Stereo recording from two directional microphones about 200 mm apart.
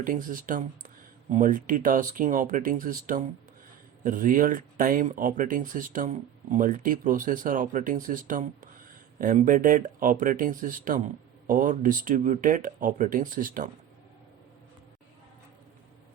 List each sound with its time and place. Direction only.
0.0 s speech: 45° right (ahead or behind)